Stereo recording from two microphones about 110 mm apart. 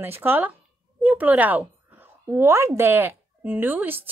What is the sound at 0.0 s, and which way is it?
A woman's voice, 20° right (ahead or behind).